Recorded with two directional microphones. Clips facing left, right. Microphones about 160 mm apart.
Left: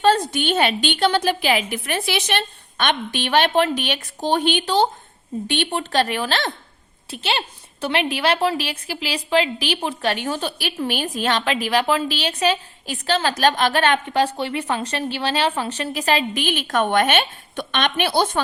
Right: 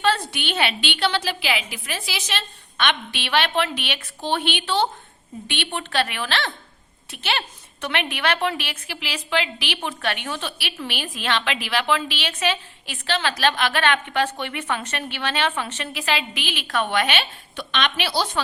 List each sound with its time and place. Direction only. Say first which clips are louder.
0.0 s a woman's voice: left 5 dB; 45° left (ahead or behind); by 2.4 s 60° left (ahead or behind)
2.7 s a woman's voice: left 3 dB; 45° left (ahead or behind)
7.1 s a woman's voice: left 2 dB; 30° left (ahead or behind); by 18.3 s 50° left (ahead or behind)